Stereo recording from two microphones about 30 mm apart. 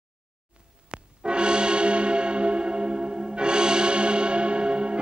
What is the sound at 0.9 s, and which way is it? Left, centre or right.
Gong, right.